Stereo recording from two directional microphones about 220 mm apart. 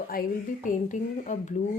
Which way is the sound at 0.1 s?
40° left (ahead or behind).